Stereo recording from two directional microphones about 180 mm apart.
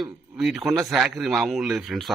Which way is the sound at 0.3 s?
Centre (ahead or behind).